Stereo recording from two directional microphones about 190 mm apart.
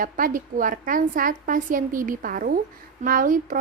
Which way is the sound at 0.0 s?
45° right (ahead or behind).